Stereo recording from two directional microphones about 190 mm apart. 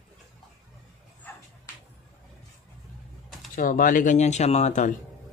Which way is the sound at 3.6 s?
45° left (ahead or behind).